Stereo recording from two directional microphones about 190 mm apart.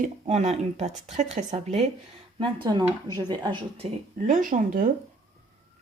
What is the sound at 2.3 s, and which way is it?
Speech, 25° right (ahead or behind).